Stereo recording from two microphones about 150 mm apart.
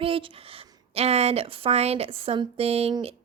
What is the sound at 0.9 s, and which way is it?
Speech, 45° right (ahead or behind).